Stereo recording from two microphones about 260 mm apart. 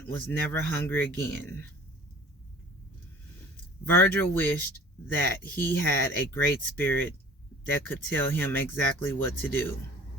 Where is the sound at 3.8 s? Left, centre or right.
Centre.